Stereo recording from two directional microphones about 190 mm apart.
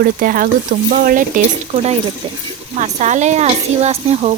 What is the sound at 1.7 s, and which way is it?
Speech, 35° right (ahead or behind).